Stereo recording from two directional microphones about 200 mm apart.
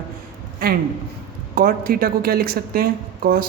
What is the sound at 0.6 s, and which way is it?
A man's voice, 45° right (ahead or behind).